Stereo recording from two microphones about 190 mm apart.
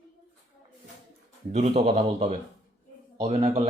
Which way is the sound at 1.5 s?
35° right (ahead or behind).